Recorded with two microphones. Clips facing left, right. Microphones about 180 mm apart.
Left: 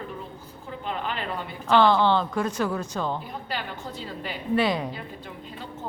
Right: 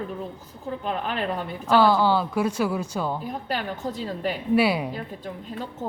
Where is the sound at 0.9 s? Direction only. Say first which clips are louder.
Right 3 dB; 45° right (ahead or behind).